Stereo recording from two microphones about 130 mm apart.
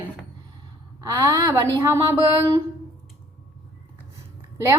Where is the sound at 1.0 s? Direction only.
30° right (ahead or behind).